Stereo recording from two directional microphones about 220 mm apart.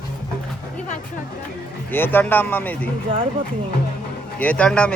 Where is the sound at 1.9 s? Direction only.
10° left (ahead or behind).